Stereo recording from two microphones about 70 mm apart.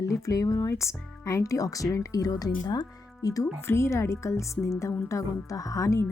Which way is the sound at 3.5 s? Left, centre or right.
Left.